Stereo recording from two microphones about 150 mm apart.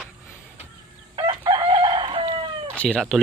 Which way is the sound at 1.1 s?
35° right (ahead or behind).